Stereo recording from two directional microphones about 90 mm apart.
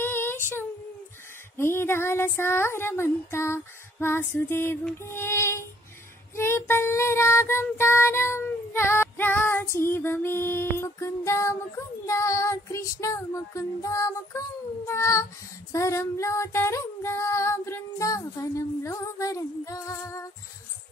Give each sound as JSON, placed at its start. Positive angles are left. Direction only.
{"t": 0.0, "sound": "child singing", "side_deg": 25}
{"t": 1.6, "sound": "a sound", "side_deg": 25}
{"t": 4.9, "sound": "music", "side_deg": 30}
{"t": 6.3, "sound": "child singing", "side_deg": 30}
{"t": 12.1, "sound": "female singing", "side_deg": 35}